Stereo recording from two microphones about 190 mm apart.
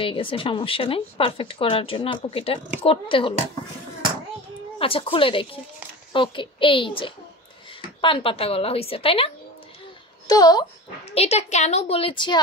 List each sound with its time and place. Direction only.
0.0 s speech: 25° left (ahead or behind)
4.7 s speech: 30° left (ahead or behind)
11.1 s a woman's voice: 35° left (ahead or behind)